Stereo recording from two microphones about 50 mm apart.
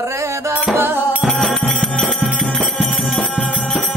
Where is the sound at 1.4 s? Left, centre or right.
Centre.